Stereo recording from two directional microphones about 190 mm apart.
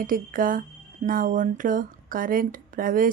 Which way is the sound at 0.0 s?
45° right (ahead or behind).